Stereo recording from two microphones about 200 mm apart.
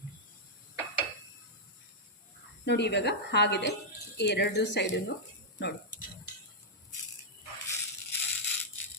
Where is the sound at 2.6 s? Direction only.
60° left (ahead or behind).